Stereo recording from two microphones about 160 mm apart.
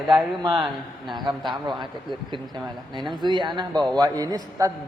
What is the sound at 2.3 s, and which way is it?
A man's voice, 30° right (ahead or behind).